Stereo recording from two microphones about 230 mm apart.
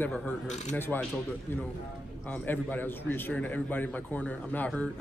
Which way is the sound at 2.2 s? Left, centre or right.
Centre.